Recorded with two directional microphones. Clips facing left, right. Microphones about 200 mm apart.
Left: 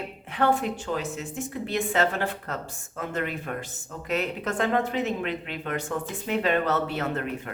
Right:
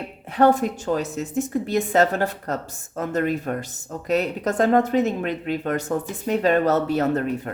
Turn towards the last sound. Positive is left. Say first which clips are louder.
# right 7 dB
turn(degrees=-40)  # may be behind; listen again after turning